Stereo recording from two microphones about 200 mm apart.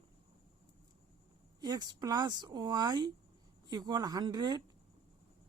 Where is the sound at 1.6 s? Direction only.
20° right (ahead or behind).